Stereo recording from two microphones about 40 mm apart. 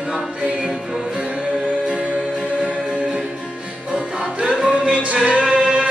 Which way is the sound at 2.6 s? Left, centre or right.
Right.